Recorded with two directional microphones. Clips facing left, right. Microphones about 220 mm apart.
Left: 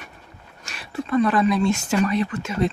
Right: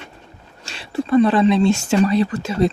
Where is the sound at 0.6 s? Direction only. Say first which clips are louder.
Right 6 dB; 30° right (ahead or behind).